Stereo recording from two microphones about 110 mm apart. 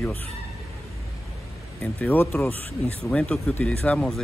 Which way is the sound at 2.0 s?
20° left (ahead or behind).